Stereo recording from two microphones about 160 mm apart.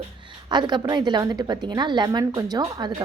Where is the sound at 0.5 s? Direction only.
25° right (ahead or behind).